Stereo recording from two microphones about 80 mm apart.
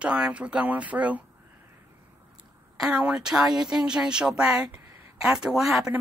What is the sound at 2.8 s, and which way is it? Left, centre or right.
A woman's voice, centre.